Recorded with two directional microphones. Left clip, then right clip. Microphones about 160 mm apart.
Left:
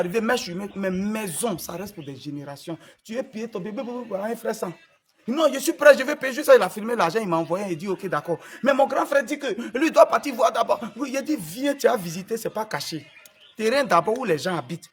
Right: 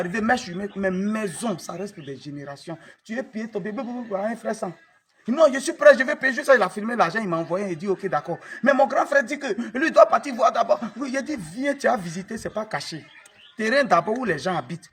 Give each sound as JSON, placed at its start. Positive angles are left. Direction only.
{"t": 0.1, "sound": "a man's voice", "side_deg": 25}